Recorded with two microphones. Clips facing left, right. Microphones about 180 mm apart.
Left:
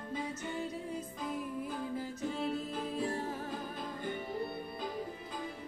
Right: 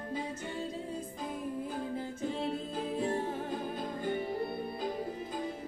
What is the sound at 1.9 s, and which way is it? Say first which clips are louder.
Music: right 1 dB; 25° right (ahead or behind).